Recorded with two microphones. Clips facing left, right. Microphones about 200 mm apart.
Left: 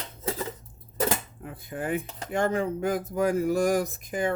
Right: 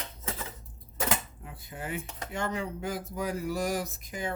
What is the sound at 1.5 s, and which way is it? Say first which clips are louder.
Dishes: left 8 dB; 50° left (ahead or behind).